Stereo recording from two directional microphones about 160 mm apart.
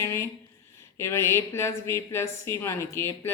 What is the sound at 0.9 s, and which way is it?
A woman's voice, 15° left (ahead or behind).